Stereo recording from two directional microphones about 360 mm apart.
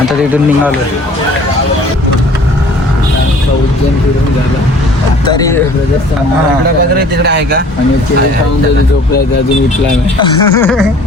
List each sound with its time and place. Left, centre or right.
5.2 s speech: centre
7.2 s speech: right
10.2 s speech: centre